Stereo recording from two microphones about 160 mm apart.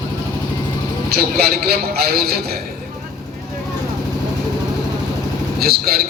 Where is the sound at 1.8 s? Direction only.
75° right (ahead or behind).